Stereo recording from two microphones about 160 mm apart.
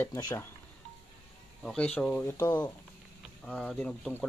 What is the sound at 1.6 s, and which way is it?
Speech, 5° left (ahead or behind).